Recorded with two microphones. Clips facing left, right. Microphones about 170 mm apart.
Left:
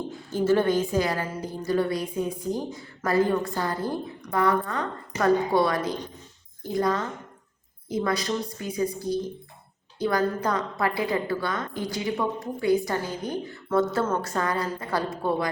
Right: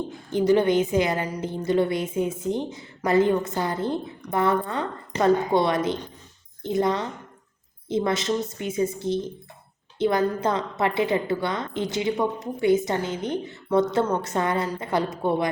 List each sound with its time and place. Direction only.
0.3 s a woman's voice: 15° right (ahead or behind)